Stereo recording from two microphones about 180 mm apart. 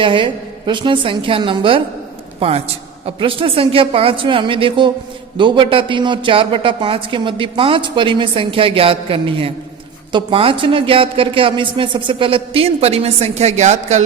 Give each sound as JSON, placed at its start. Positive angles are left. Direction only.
{"t": 0.0, "sound": "a man's voice", "side_deg": -25}